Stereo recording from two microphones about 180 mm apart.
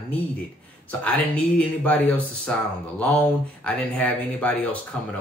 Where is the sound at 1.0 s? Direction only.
5° left (ahead or behind).